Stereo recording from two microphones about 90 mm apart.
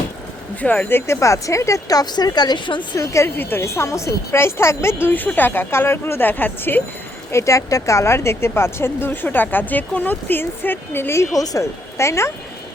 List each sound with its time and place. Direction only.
0.6 s speech: 15° left (ahead or behind); by 3.0 s 55° left (ahead or behind)
3.0 s speech: 35° left (ahead or behind)
7.3 s speech: 35° left (ahead or behind)
11.3 s speech: 40° left (ahead or behind)